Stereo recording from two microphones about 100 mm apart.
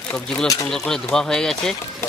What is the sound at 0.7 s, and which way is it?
Speech, 5° left (ahead or behind).